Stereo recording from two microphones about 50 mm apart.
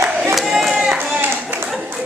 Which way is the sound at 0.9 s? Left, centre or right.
Right.